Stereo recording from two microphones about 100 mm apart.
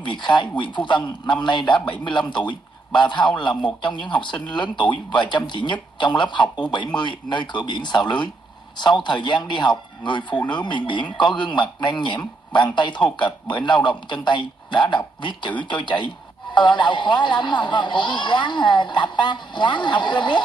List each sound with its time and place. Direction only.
0.0 s a man's voice: 50° left (ahead or behind)